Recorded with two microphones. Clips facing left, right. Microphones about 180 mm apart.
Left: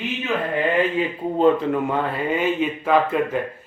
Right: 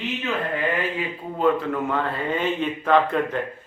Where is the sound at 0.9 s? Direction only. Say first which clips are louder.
Left 7 dB; 25° left (ahead or behind).